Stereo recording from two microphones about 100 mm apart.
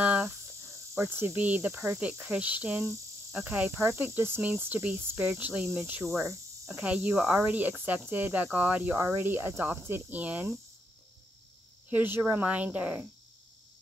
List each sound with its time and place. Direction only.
0.0 s cricket: 15° right (ahead or behind)
0.9 s speech: 25° right (ahead or behind)
2.8 s cricket: 30° right (ahead or behind)
3.4 s speech: 20° right (ahead or behind)
6.8 s speech: 10° right (ahead or behind)
11.9 s speech: 15° right (ahead or behind)